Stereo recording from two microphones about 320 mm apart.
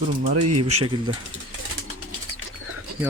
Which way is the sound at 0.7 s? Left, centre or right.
Centre.